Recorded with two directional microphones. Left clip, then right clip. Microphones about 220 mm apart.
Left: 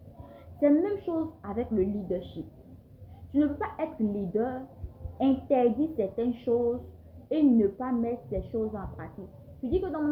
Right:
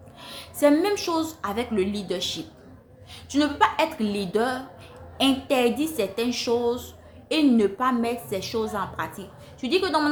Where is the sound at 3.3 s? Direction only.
25° right (ahead or behind).